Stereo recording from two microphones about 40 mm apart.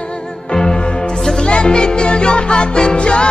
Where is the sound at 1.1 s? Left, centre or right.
Centre.